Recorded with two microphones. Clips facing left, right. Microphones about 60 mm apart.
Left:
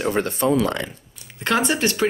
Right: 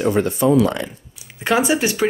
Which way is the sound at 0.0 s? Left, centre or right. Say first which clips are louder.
Right 4 dB; left.